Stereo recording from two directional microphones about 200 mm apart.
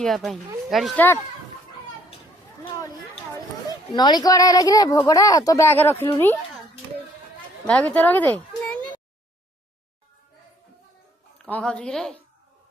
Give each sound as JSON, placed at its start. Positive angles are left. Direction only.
{"t": 0.0, "sound": "speech", "side_deg": 0}
{"t": 3.9, "sound": "a woman's voice", "side_deg": 20}
{"t": 7.7, "sound": "a child's voice", "side_deg": 5}
{"t": 11.4, "sound": "speech", "side_deg": 5}